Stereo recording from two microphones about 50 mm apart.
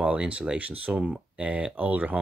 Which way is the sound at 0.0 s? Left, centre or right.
Right.